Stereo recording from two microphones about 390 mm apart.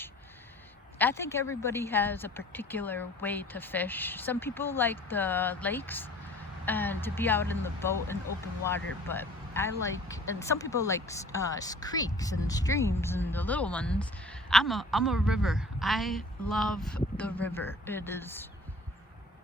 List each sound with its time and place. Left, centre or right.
0.9 s a woman's voice: centre